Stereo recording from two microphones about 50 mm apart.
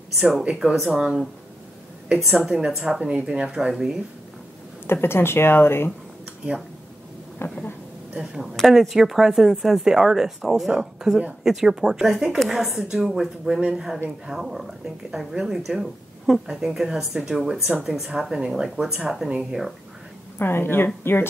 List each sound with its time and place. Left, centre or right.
0.2 s speech: centre
2.4 s speech: centre
5.0 s speech: left
7.4 s a sound: left
8.6 s speech: centre
20.3 s speech: left